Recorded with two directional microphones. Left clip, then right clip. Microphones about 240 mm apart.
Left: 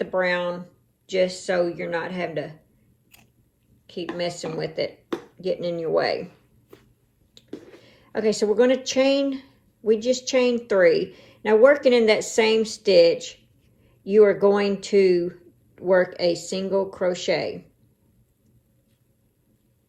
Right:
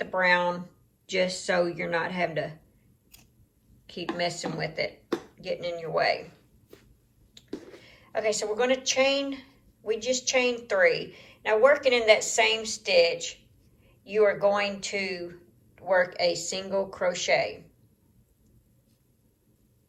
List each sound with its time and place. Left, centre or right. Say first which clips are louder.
0.1 s speech: right 2 dB; centre
3.8 s speech: left 2 dB; centre
7.5 s a sound: left 1 dB; centre
7.9 s speech: left 4 dB; left